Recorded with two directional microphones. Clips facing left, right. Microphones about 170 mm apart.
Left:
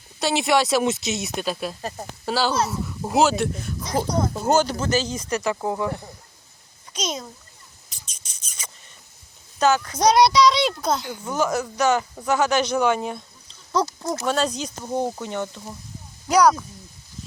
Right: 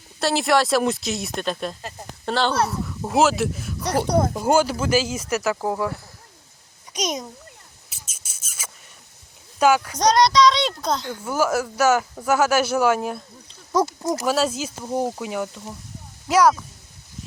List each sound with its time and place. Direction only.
0.2 s speech: centre (ahead or behind)
3.8 s speech: 65° right (ahead or behind)
4.4 s speech: 10° right (ahead or behind)
6.9 s speech: 15° right (ahead or behind)
7.9 s a sound: 5° right (ahead or behind)
9.6 s speech: 10° right (ahead or behind)
10.0 s speech: 5° left (ahead or behind)
11.2 s speech: 5° right (ahead or behind)